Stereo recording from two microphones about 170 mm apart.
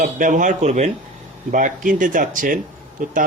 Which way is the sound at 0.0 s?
50° right (ahead or behind).